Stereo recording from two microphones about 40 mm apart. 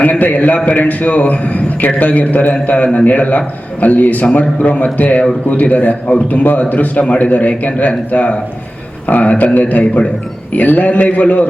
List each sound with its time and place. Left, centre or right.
0.0 s a man's voice: left